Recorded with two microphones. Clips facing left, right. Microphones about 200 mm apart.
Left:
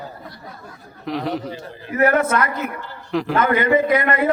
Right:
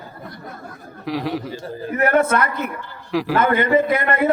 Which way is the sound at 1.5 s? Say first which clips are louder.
Right 4 dB; 40° right (ahead or behind).